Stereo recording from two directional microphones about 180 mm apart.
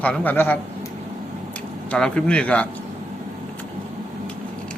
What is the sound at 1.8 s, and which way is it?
Speech, 5° left (ahead or behind).